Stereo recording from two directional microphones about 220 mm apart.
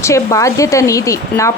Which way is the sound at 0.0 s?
15° left (ahead or behind).